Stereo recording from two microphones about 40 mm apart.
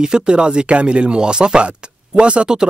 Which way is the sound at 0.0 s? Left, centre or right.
Right.